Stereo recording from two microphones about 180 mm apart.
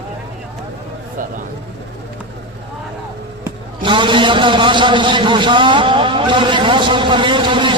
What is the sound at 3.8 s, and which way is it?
A man's voice, 25° right (ahead or behind).